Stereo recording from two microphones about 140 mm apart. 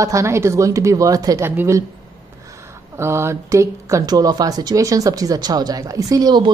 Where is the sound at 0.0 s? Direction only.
20° right (ahead or behind).